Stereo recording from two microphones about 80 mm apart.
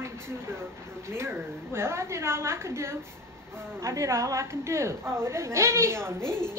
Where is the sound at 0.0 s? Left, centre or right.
Right.